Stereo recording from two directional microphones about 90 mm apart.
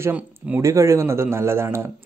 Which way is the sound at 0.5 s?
35° right (ahead or behind).